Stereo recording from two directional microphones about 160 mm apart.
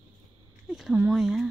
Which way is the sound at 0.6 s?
5° right (ahead or behind).